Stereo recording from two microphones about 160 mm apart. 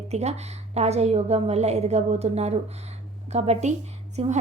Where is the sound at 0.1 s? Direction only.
40° right (ahead or behind).